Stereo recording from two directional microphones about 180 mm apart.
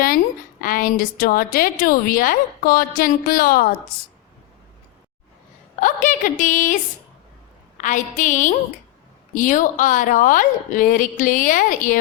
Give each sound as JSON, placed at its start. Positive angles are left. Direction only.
{"t": 0.6, "sound": "a woman's voice", "side_deg": 50}
{"t": 5.8, "sound": "a woman's voice", "side_deg": 45}
{"t": 7.8, "sound": "a woman's voice", "side_deg": 45}